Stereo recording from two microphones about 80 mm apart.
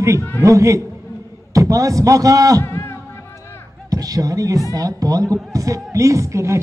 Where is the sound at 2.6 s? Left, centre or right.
Left.